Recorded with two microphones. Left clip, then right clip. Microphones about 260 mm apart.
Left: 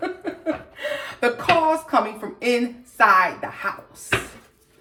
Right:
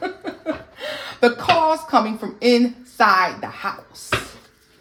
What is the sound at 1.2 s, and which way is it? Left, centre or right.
Speech, right.